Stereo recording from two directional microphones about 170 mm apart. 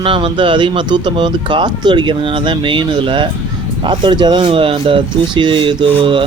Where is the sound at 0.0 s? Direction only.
30° right (ahead or behind).